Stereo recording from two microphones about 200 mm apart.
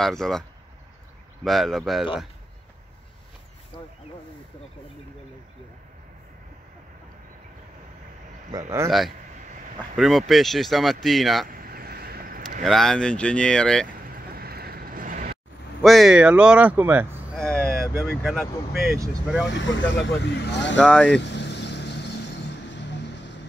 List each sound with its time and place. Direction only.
0.0 s speech: centre (ahead or behind)
8.5 s speech: 15° right (ahead or behind)
9.9 s speech: centre (ahead or behind)
11.4 s vehicle: 45° right (ahead or behind)
12.6 s speech: centre (ahead or behind)
14.1 s vehicle: 50° right (ahead or behind)
15.8 s speech: centre (ahead or behind)
17.4 s speech: 5° left (ahead or behind)
19.5 s speech: 65° left (ahead or behind)
20.8 s speech: 5° left (ahead or behind)
21.2 s vehicle: 60° left (ahead or behind)